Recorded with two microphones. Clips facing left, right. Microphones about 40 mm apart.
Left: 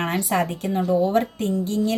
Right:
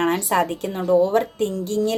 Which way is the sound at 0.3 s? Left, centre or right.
Right.